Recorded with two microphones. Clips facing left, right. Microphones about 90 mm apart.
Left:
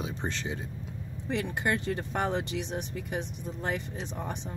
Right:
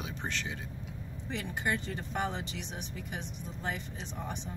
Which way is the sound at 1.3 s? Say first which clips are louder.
Left 5 dB; 60° left (ahead or behind).